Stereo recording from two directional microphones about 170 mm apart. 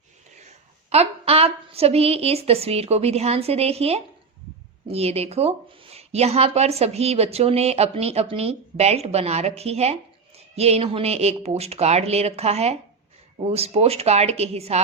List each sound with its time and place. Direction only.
0.3 s a woman's voice: 40° right (ahead or behind)